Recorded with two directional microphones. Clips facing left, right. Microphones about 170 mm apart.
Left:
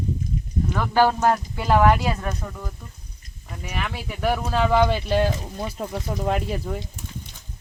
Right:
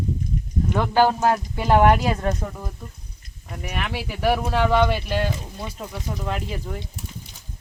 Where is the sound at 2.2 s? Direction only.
30° right (ahead or behind).